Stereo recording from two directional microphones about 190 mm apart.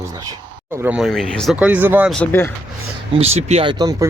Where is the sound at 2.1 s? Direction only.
5° left (ahead or behind).